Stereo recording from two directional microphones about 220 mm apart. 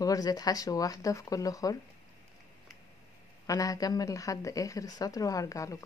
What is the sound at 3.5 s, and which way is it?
A woman's voice, 15° left (ahead or behind).